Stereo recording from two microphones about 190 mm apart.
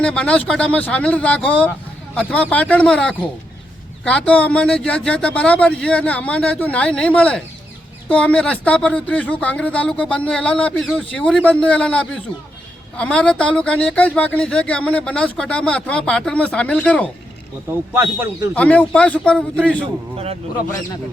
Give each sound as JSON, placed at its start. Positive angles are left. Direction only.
{"t": 0.0, "sound": "speech", "side_deg": 5}
{"t": 17.9, "sound": "a man's voice", "side_deg": -10}
{"t": 18.5, "sound": "speech", "side_deg": 5}
{"t": 20.1, "sound": "speech", "side_deg": -30}